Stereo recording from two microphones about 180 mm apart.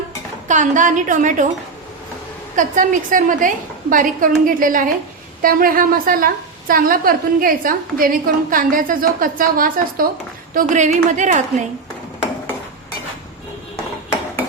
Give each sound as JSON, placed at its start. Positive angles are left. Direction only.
{"t": 0.4, "sound": "a woman's voice", "side_deg": -45}
{"t": 2.6, "sound": "a woman's voice", "side_deg": -45}